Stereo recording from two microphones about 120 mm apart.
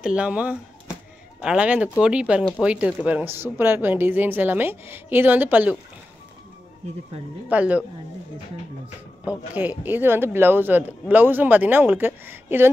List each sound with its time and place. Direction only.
0.0 s a woman's voice: 10° right (ahead or behind)
7.4 s a woman's voice: 10° right (ahead or behind)
9.6 s a woman's voice: 15° right (ahead or behind)